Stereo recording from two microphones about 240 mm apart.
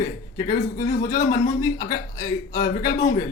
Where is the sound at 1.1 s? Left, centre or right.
Centre.